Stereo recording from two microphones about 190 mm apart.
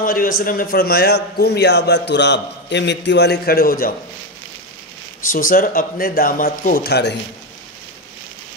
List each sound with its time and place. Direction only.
0.0 s a man's voice: 50° left (ahead or behind)
5.3 s a man's voice: 45° left (ahead or behind)